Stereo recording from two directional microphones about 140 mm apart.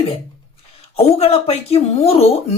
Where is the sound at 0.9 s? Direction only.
50° left (ahead or behind).